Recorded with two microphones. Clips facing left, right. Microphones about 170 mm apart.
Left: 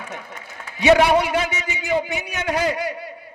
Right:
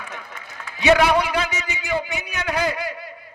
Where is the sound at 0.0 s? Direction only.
40° left (ahead or behind).